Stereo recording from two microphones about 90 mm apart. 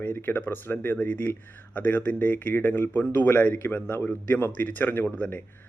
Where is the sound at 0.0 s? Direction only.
20° left (ahead or behind).